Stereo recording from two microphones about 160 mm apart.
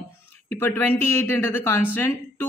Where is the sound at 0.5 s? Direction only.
15° left (ahead or behind).